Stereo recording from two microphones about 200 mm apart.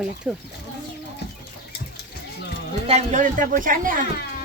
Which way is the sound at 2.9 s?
35° right (ahead or behind).